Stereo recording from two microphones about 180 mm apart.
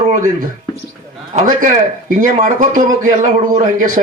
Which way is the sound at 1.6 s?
45° right (ahead or behind).